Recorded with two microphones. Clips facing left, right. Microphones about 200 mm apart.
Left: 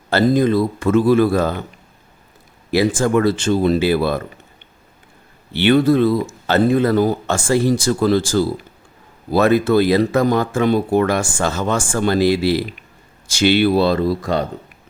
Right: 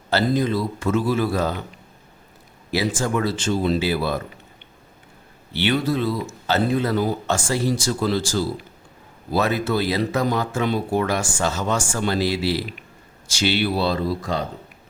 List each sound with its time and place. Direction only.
0.1 s speech: 50° left (ahead or behind)
2.7 s speech: 55° left (ahead or behind)
5.5 s speech: 55° left (ahead or behind)